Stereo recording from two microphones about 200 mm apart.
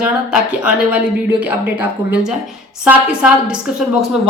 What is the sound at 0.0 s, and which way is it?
A woman's voice, 5° right (ahead or behind).